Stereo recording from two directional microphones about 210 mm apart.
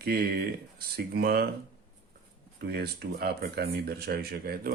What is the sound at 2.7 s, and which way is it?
Speech, 50° right (ahead or behind).